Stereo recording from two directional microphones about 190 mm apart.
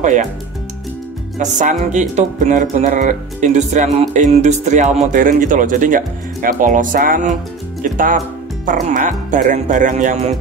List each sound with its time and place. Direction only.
0.0 s speech: 40° right (ahead or behind)
1.4 s speech: 40° right (ahead or behind)